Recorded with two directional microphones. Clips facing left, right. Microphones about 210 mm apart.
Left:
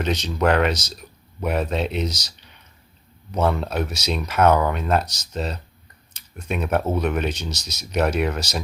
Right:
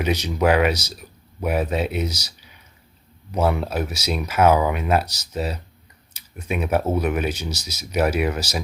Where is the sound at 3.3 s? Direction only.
10° right (ahead or behind).